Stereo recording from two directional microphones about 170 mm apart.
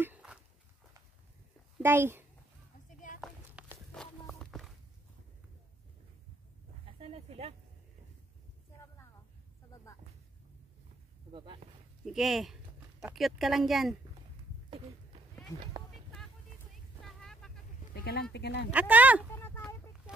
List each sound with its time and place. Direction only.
0.0 s walk: 5° right (ahead or behind)
1.8 s speech: 15° right (ahead or behind)
3.2 s a sound: centre (ahead or behind)
3.9 s walk: 5° left (ahead or behind)
7.0 s a sound: 35° right (ahead or behind)
12.0 s speech: centre (ahead or behind)
17.0 s vehicle: 5° left (ahead or behind)
17.9 s speech: 70° left (ahead or behind)
18.7 s speech: 10° right (ahead or behind)
19.3 s a sound: 15° left (ahead or behind)